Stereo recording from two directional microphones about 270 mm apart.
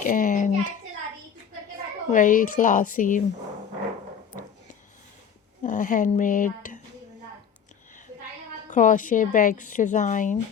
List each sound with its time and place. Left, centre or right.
0.0 s a sound: left
2.0 s a woman's voice: left
5.6 s speech: left
8.7 s a woman's voice: left